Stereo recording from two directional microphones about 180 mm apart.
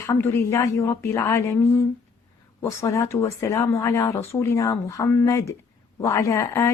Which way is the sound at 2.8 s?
15° left (ahead or behind).